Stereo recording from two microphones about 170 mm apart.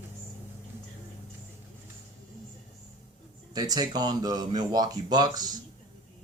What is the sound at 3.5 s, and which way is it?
Speech, 25° right (ahead or behind).